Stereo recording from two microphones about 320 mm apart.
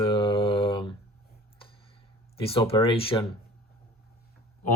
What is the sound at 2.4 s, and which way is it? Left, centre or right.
Speech, centre.